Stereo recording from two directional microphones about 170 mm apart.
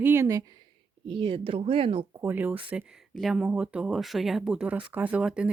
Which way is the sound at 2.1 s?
10° right (ahead or behind).